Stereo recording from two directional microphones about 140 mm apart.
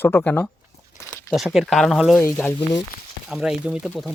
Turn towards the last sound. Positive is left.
turn(degrees=-5)  # may be behind; listen again after turning